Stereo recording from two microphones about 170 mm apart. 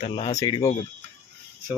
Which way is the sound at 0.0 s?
40° left (ahead or behind).